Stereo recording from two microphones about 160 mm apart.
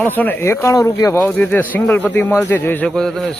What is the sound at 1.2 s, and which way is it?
A man's voice, 5° left (ahead or behind).